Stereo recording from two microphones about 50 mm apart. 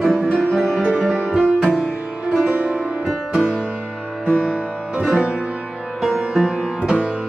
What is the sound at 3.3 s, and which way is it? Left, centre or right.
Music, centre.